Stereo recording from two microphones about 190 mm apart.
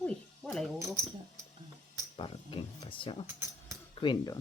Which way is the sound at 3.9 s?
25° left (ahead or behind).